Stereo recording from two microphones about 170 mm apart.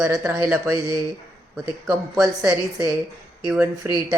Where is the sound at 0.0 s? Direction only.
15° right (ahead or behind).